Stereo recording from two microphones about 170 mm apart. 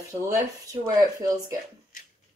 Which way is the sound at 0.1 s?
20° right (ahead or behind).